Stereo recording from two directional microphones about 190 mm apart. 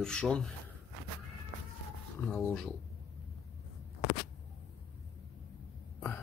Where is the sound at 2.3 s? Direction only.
5° left (ahead or behind).